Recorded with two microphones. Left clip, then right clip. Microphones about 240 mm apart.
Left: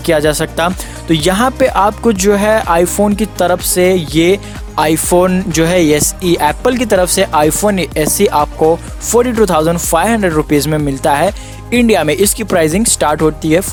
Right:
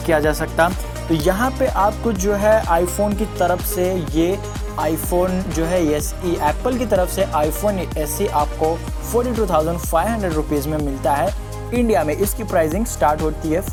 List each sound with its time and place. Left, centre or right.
0.0 s speech: left
1.1 s speech: left